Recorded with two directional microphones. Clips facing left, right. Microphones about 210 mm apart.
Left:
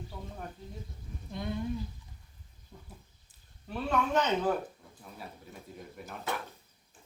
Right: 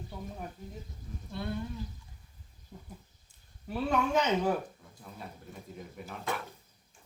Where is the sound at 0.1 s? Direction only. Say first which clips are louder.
Right 3 dB; 10° right (ahead or behind).